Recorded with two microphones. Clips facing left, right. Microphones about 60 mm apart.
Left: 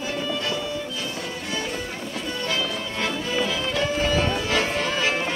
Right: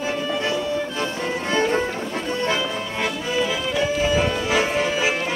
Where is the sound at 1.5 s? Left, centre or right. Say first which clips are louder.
Right 10 dB; right.